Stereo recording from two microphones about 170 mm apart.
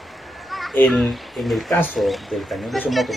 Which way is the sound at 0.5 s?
Centre (ahead or behind).